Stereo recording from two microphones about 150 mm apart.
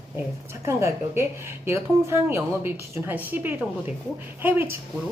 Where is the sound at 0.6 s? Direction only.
20° right (ahead or behind).